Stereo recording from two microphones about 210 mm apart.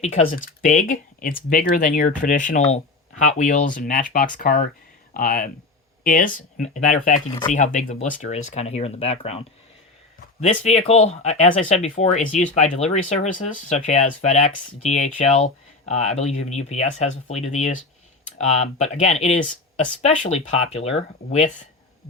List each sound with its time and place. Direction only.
0.0 s speech: 35° left (ahead or behind)
10.4 s speech: 30° left (ahead or behind)